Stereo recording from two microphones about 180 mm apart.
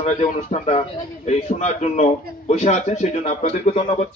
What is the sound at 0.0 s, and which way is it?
A man's voice, 40° left (ahead or behind).